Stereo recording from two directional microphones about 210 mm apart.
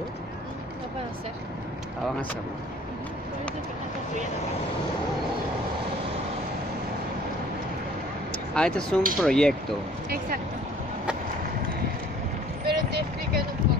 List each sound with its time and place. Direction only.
8.5 s speech: 5° left (ahead or behind)
10.0 s speech: 45° right (ahead or behind)
12.6 s vehicle: 50° right (ahead or behind)